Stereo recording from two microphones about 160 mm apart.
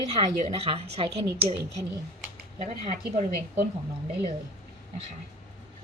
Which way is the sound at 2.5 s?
40° right (ahead or behind).